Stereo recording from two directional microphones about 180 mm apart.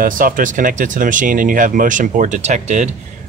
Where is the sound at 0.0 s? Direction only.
50° right (ahead or behind).